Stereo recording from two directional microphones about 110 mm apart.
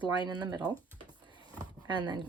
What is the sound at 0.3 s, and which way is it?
Speech, 40° right (ahead or behind).